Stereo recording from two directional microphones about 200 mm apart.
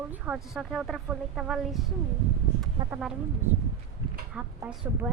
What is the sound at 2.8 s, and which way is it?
Speech, 20° right (ahead or behind).